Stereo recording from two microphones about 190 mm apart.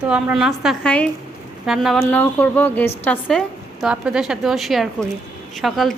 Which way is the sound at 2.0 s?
10° left (ahead or behind).